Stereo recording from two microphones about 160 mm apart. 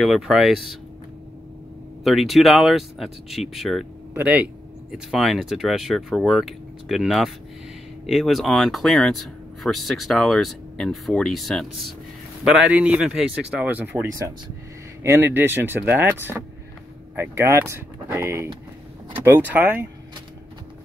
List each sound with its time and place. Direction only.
0.0 s speech: centre (ahead or behind)
2.0 s speech: centre (ahead or behind)
15.0 s speech: 15° right (ahead or behind)